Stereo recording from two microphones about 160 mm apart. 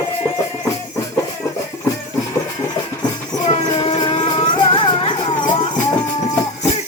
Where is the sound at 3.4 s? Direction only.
35° left (ahead or behind).